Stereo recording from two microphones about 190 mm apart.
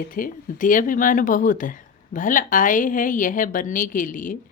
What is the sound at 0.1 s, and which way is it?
Speech, 45° left (ahead or behind).